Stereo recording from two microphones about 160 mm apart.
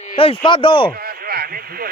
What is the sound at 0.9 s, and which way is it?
Radio, 70° right (ahead or behind).